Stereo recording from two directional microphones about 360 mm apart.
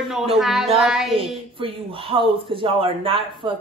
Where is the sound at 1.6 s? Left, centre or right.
Centre.